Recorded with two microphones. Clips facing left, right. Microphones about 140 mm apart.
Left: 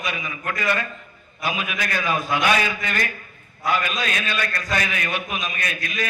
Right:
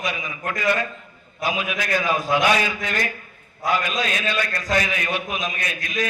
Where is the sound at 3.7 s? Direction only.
30° right (ahead or behind).